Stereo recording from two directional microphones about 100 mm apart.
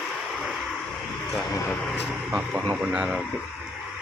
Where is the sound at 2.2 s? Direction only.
10° right (ahead or behind).